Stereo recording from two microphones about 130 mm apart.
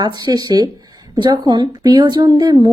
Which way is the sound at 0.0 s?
30° right (ahead or behind).